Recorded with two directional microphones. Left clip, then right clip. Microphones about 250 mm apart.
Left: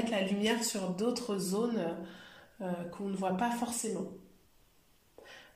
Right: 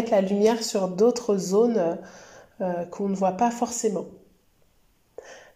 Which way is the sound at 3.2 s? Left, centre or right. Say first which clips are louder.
Right 10 dB; centre.